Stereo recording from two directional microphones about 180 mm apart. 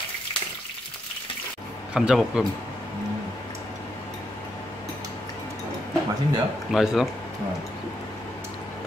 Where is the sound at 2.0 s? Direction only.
5° right (ahead or behind).